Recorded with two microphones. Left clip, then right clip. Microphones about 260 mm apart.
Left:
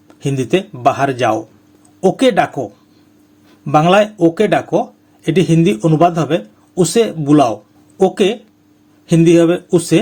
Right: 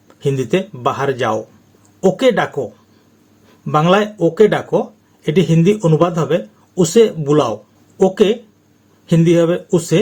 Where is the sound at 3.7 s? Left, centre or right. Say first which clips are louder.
Left 3 dB; left.